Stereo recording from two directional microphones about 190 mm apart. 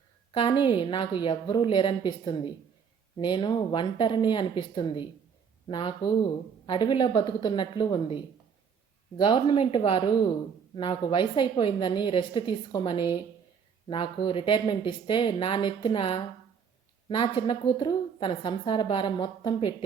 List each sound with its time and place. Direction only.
0.3 s a woman's voice: 25° left (ahead or behind)